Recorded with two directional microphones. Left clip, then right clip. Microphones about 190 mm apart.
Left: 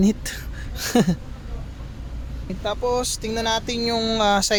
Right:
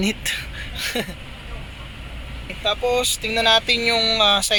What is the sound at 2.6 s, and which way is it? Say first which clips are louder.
Speech: right 3 dB; 50° left (ahead or behind).